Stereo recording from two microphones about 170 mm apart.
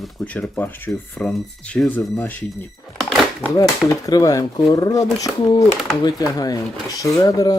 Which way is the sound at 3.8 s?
20° left (ahead or behind).